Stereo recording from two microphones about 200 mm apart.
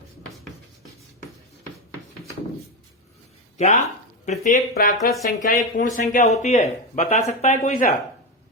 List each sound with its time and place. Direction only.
3.6 s speech: 35° left (ahead or behind)